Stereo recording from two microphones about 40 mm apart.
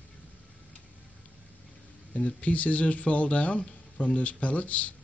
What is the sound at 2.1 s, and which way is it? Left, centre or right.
Speech, left.